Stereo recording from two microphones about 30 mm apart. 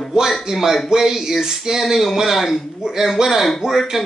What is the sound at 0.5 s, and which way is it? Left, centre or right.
Speech, centre.